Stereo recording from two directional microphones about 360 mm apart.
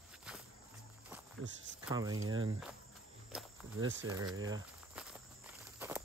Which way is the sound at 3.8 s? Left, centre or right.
Right.